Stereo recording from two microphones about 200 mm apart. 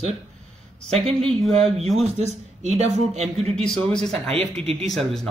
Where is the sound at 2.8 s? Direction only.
35° right (ahead or behind).